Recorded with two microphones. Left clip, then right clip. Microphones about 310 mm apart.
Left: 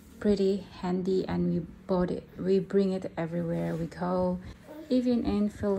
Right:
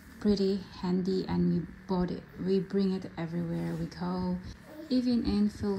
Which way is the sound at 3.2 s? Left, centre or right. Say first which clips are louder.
Left 5 dB; left.